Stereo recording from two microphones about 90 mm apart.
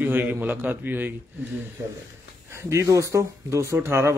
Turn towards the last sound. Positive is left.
turn(degrees=-30)  # may be behind; listen again after turning